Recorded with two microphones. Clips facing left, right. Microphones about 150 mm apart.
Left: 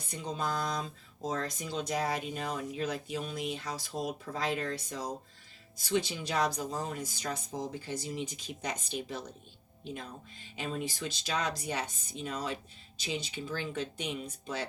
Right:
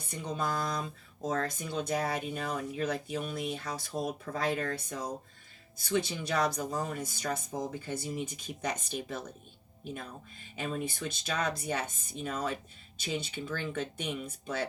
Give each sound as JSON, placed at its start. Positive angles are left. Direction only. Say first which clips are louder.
{"t": 0.1, "sound": "speech", "louder": "right 1 dB", "side_deg": -55}